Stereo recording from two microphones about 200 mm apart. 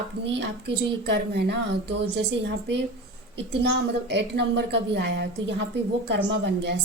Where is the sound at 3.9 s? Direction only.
55° right (ahead or behind).